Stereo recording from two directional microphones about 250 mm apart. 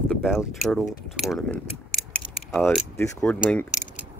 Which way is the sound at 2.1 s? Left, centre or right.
Centre.